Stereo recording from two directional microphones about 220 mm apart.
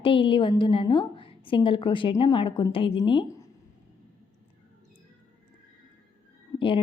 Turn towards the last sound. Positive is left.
turn(degrees=25)  # may be behind; listen again after turning